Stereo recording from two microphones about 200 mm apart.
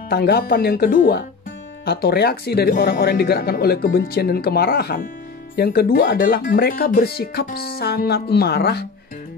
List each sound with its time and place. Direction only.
0.1 s speech: 50° left (ahead or behind)